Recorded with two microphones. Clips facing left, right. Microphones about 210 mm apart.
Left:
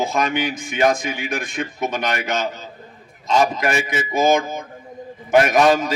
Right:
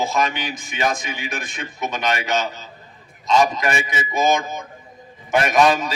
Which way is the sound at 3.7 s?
55° left (ahead or behind).